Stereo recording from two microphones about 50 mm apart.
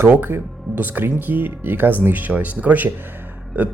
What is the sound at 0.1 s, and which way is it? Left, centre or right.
Speech, right.